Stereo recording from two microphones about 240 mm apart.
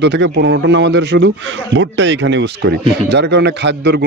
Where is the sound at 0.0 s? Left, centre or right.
Right.